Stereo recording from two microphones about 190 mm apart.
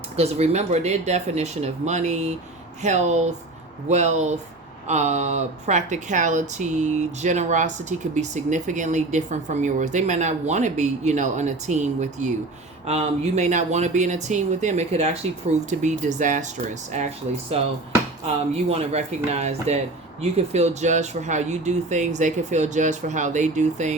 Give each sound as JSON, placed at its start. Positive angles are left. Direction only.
{"t": 0.2, "sound": "speech", "side_deg": -35}
{"t": 18.5, "sound": "speech", "side_deg": -35}